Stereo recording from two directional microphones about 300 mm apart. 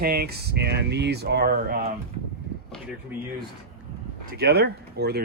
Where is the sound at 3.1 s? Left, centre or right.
Centre.